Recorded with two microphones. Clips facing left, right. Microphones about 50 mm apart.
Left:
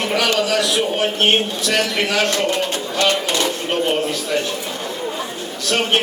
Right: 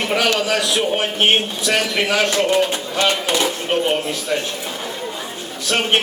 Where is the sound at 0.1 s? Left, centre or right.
Centre.